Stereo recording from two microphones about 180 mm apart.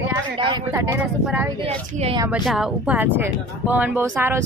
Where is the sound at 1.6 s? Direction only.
35° right (ahead or behind).